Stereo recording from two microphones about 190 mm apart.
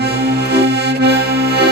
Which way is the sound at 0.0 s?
60° right (ahead or behind).